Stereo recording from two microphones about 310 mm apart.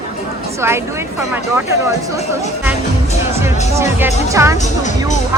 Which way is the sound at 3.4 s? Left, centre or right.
Centre.